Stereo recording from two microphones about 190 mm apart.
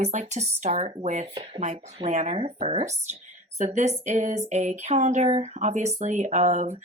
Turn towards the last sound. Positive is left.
turn(degrees=-40)  # may be behind; listen again after turning